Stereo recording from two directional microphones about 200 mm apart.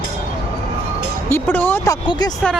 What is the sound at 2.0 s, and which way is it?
Speech, 25° left (ahead or behind).